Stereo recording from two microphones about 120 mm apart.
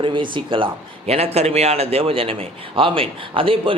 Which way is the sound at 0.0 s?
45° right (ahead or behind).